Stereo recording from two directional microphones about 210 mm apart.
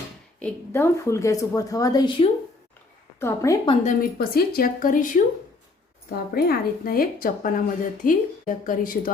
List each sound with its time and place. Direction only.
0.3 s a woman's voice: 10° left (ahead or behind); by 2.3 s 25° left (ahead or behind)
3.2 s a woman's voice: 15° left (ahead or behind)
3.8 s a woman's voice: 45° left (ahead or behind)